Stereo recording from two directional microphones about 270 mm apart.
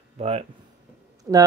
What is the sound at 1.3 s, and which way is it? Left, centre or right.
Speech, centre.